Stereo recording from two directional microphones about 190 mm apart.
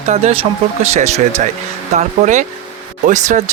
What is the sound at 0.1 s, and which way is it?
Speech, 35° right (ahead or behind).